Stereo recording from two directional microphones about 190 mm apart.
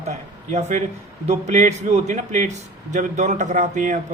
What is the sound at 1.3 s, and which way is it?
A man's voice, 40° right (ahead or behind).